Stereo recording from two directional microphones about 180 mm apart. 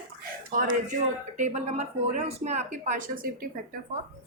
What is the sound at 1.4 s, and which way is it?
Speech, 40° right (ahead or behind).